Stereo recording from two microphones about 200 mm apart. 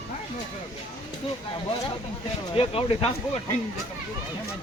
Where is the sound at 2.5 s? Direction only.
30° left (ahead or behind).